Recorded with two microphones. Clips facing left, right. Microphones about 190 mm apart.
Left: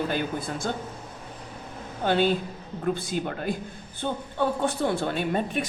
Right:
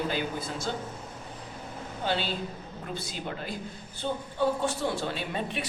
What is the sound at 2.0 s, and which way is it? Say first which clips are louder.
Speech: left 8 dB; 50° left (ahead or behind).